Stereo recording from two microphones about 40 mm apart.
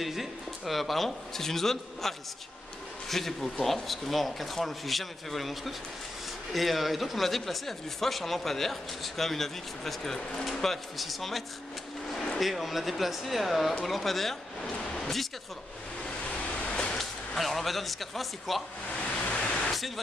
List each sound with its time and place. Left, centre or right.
0.0 s speech: centre
16.3 s waves: left
17.4 s speech: centre
19.2 s pink noise: left